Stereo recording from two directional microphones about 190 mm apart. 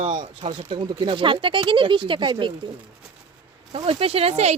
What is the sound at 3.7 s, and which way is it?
Speech, 30° right (ahead or behind).